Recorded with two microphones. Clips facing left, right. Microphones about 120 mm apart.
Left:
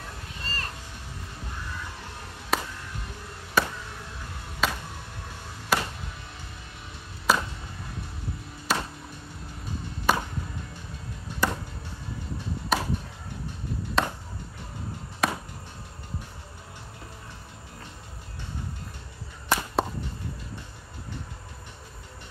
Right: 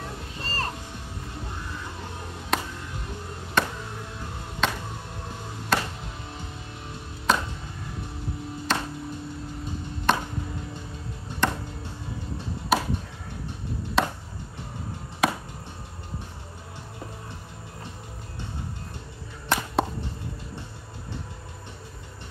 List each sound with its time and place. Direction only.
0.4 s music: 35° right (ahead or behind)
2.5 s music: 5° left (ahead or behind)
3.6 s chop: 5° left (ahead or behind)
4.6 s music: 5° left (ahead or behind)
7.3 s chop: 5° left (ahead or behind)
8.7 s music: 10° left (ahead or behind)
10.1 s music: 5° left (ahead or behind)
11.4 s music: 5° left (ahead or behind)
12.7 s chop: 5° right (ahead or behind)
14.0 s chop: centre (ahead or behind)
15.2 s chop: centre (ahead or behind)
19.5 s a sound: 5° left (ahead or behind)